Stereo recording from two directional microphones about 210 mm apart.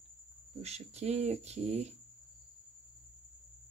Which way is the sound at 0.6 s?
30° right (ahead or behind).